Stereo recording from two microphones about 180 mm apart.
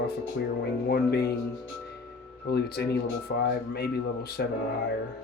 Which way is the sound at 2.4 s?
65° left (ahead or behind).